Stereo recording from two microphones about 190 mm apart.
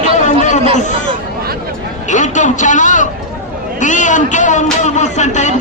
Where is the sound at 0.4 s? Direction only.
40° left (ahead or behind).